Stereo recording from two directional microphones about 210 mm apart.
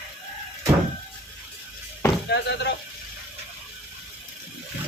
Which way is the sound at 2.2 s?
55° left (ahead or behind).